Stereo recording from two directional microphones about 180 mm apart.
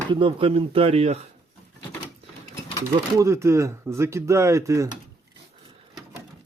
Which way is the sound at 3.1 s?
15° right (ahead or behind).